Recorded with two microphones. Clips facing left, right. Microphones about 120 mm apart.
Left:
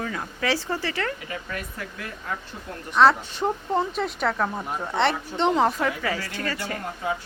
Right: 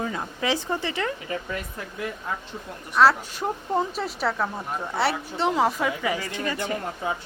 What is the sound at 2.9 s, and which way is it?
Speech, 5° right (ahead or behind).